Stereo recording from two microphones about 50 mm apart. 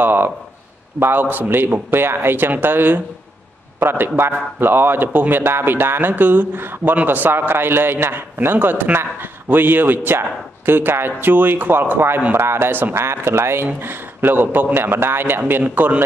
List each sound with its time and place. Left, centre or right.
0.0 s a sound: right
0.9 s a man's voice: right
12.9 s speech: right
13.7 s a man's voice: right
15.6 s speech: right